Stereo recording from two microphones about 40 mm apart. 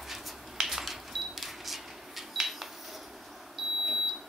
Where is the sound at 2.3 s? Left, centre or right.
Centre.